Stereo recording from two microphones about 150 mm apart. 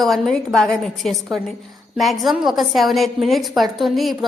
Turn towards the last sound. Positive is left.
turn(degrees=0)  # may be behind; listen again after turning